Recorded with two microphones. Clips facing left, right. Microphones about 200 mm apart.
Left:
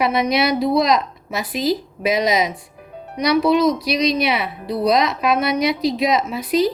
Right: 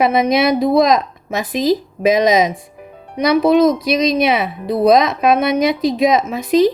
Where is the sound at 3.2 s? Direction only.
50° right (ahead or behind).